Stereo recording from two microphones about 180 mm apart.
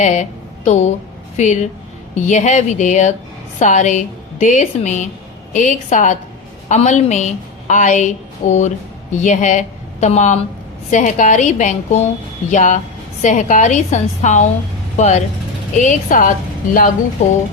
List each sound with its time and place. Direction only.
0.0 s a woman's voice: 40° left (ahead or behind)